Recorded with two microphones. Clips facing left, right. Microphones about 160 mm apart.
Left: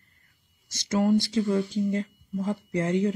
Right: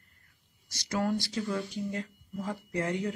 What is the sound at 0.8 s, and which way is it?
Speech, 20° left (ahead or behind).